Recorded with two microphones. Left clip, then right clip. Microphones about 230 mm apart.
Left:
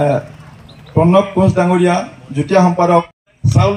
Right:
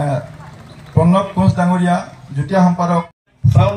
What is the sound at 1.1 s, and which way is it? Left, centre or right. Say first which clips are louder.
A man's voice: left 6 dB; left.